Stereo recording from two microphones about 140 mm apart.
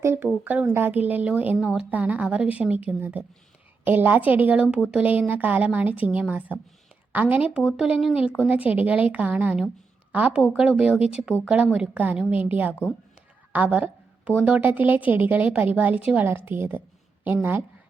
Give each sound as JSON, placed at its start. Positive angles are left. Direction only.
{"t": 0.0, "sound": "a woman's voice", "side_deg": -20}
{"t": 13.5, "sound": "a sound", "side_deg": -10}
{"t": 14.4, "sound": "a woman's voice", "side_deg": -10}